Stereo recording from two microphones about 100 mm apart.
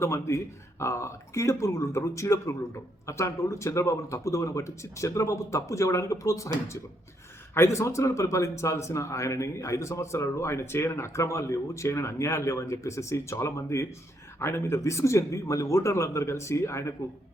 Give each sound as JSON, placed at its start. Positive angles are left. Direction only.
{"t": 0.0, "sound": "speech", "side_deg": 30}